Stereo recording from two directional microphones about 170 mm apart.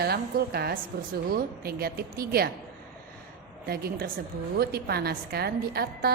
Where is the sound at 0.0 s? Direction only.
65° right (ahead or behind).